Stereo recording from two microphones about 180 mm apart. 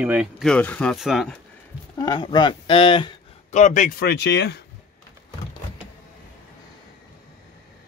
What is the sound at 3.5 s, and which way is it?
Speech, 40° left (ahead or behind).